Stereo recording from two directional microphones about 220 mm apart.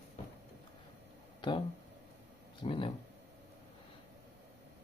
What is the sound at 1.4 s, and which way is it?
Speech, 20° left (ahead or behind).